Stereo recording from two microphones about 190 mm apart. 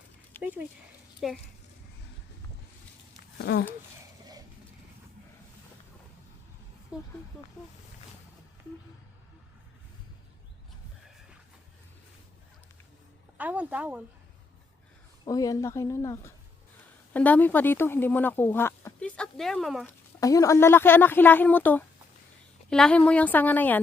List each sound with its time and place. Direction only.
0.4 s dog: 10° left (ahead or behind)
1.2 s speech: centre (ahead or behind)
3.3 s speech: 65° left (ahead or behind)
6.9 s a sound: 5° right (ahead or behind)
13.3 s speech: 10° right (ahead or behind)
15.2 s speech: 20° left (ahead or behind); by 19.9 s centre (ahead or behind)
20.1 s speech: 15° left (ahead or behind)